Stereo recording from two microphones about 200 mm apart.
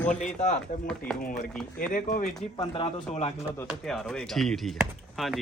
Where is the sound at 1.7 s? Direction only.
40° left (ahead or behind).